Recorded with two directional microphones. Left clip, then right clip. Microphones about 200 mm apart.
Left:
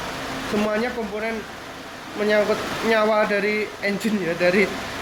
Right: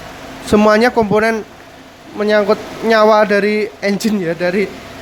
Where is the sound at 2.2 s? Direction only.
30° right (ahead or behind).